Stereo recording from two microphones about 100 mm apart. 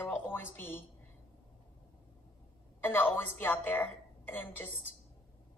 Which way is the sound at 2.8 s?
20° left (ahead or behind).